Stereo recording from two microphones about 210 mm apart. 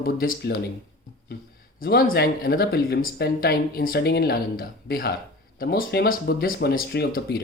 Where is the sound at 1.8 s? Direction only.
45° left (ahead or behind).